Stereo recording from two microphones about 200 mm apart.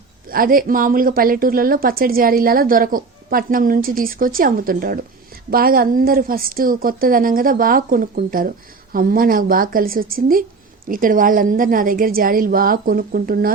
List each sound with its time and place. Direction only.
0.3 s a woman's voice: 45° right (ahead or behind)